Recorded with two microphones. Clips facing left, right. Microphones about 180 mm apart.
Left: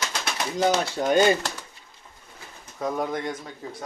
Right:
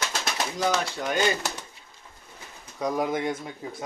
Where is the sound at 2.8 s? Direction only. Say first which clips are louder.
Right 1 dB; centre (ahead or behind).